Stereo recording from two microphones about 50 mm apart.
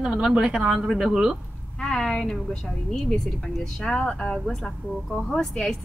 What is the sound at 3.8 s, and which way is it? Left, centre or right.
Speech, centre.